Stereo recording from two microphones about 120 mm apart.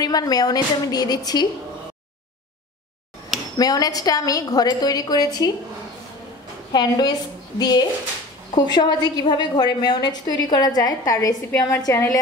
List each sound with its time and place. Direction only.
0.0 s a woman's voice: 30° left (ahead or behind)
3.5 s a woman's voice: 30° left (ahead or behind)
6.7 s a woman's voice: 35° left (ahead or behind)